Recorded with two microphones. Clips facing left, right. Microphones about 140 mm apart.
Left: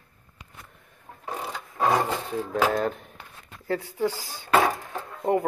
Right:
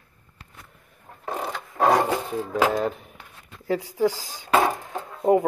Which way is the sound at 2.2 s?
10° right (ahead or behind).